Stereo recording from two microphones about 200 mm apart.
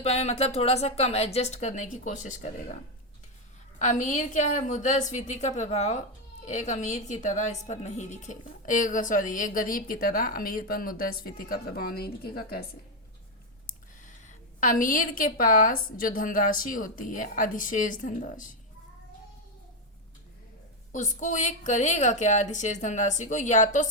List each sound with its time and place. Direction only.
0.0 s a woman's voice: 30° left (ahead or behind)
3.8 s a woman's voice: 40° left (ahead or behind)
13.7 s a woman's voice: 40° left (ahead or behind)
20.9 s a woman's voice: 35° left (ahead or behind)